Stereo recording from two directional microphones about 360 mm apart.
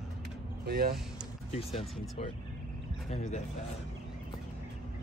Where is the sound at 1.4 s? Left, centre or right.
Centre.